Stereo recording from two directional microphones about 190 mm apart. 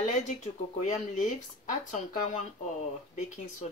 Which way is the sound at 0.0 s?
40° left (ahead or behind).